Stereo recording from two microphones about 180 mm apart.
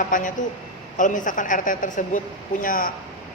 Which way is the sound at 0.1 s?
45° left (ahead or behind).